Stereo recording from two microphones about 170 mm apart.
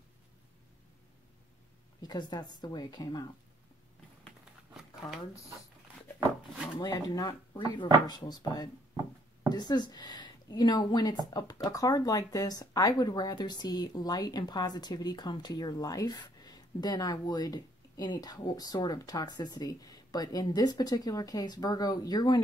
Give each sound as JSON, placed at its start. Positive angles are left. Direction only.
{"t": 2.0, "sound": "speech", "side_deg": 25}
{"t": 4.7, "sound": "a sound", "side_deg": 0}
{"t": 6.8, "sound": "speech", "side_deg": 25}